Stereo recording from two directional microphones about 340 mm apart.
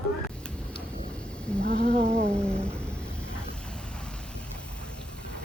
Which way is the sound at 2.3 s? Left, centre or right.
Centre.